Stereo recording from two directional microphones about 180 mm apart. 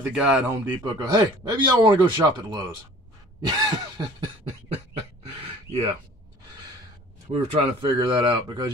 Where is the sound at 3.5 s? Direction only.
20° right (ahead or behind).